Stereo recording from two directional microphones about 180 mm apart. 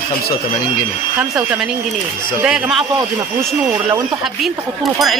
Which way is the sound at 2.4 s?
5° right (ahead or behind).